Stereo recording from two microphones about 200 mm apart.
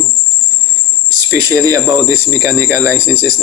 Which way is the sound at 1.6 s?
15° right (ahead or behind).